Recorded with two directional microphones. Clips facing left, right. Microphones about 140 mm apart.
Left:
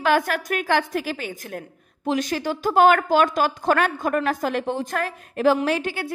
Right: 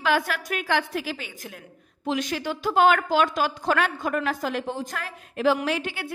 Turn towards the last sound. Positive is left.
turn(degrees=40)  # may be behind; listen again after turning